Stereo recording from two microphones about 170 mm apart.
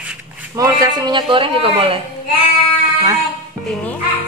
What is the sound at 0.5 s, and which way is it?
A child's voice, 20° right (ahead or behind).